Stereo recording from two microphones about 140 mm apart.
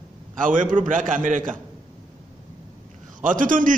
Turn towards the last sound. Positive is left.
turn(degrees=-70)  # may be behind; listen again after turning